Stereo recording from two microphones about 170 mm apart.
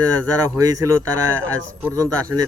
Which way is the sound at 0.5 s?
20° right (ahead or behind).